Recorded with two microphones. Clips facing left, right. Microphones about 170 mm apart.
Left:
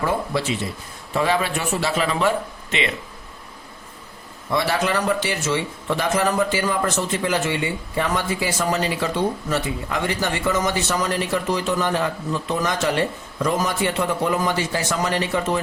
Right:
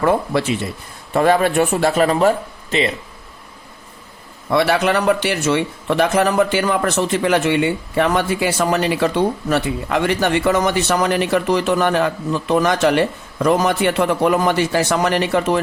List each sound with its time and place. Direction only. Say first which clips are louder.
0.0 s speech: right 6 dB; 60° right (ahead or behind); by 2.9 s 35° right (ahead or behind)
4.5 s speech: right 5 dB; 65° right (ahead or behind)